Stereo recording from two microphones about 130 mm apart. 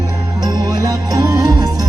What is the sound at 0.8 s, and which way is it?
Music, 30° right (ahead or behind).